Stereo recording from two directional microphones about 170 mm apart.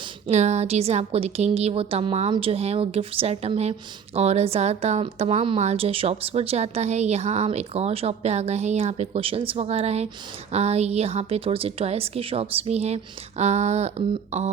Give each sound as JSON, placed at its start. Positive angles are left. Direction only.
{"t": 0.3, "sound": "a woman's voice", "side_deg": -40}